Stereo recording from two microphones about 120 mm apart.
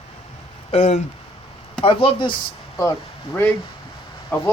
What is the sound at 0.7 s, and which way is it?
Speech, 65° left (ahead or behind).